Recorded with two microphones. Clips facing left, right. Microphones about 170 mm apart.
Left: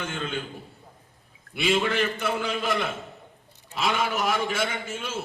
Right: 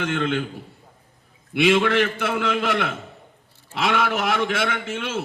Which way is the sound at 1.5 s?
70° right (ahead or behind).